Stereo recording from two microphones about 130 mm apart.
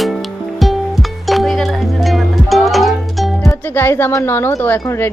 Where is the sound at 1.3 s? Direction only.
Centre (ahead or behind).